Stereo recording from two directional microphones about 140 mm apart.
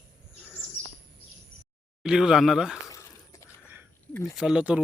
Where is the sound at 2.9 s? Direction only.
20° left (ahead or behind).